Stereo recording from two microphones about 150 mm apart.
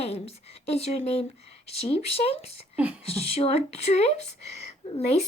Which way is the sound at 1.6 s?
45° left (ahead or behind).